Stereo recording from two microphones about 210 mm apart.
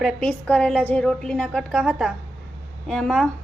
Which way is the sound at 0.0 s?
5° left (ahead or behind).